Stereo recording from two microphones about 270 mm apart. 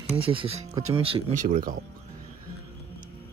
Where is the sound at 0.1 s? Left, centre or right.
Centre.